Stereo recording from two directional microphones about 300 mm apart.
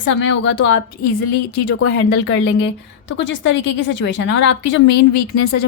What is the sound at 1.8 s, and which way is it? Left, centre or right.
A woman's voice, left.